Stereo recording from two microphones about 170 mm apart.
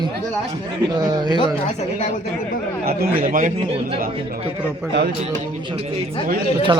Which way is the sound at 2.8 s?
60° right (ahead or behind).